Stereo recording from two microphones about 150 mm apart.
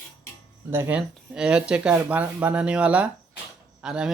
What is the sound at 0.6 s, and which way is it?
Speech, 15° right (ahead or behind).